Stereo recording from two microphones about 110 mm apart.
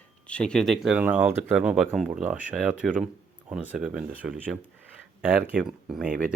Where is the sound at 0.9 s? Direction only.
15° right (ahead or behind).